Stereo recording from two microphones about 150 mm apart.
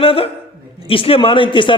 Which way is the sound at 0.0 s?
40° left (ahead or behind).